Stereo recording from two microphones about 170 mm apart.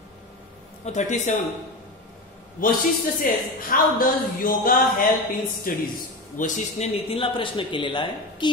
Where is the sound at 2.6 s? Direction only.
55° left (ahead or behind).